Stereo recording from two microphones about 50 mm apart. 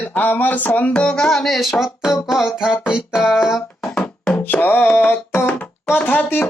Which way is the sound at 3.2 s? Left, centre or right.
Centre.